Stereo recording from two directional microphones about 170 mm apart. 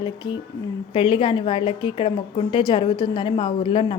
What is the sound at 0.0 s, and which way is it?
A woman's voice, 25° left (ahead or behind).